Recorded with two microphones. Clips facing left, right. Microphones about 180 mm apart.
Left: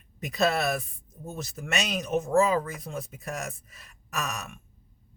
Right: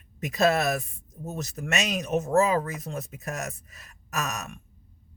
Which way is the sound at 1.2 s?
40° right (ahead or behind).